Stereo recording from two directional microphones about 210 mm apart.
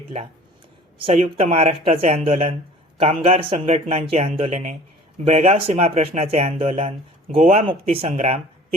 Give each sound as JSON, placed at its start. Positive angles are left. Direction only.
{"t": 0.9, "sound": "speech", "side_deg": -25}